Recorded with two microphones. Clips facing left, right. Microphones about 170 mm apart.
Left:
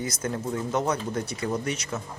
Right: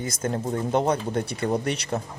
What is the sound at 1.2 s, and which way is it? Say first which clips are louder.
Speech: right 3 dB; 60° right (ahead or behind).